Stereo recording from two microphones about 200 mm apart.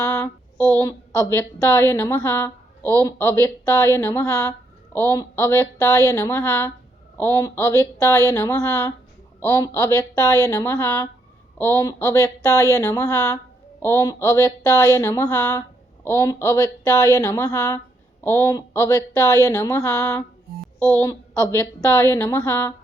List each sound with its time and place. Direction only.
0.2 s a woman's voice: 10° left (ahead or behind)